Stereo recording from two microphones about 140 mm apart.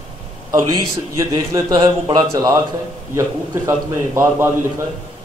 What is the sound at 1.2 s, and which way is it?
A man's voice, 25° right (ahead or behind).